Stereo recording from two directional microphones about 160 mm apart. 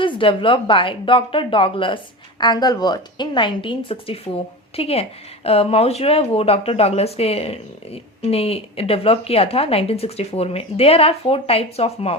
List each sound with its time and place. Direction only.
0.0 s a woman's voice: 30° left (ahead or behind)